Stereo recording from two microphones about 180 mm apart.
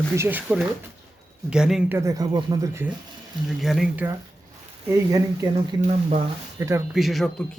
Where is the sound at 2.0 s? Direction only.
20° right (ahead or behind).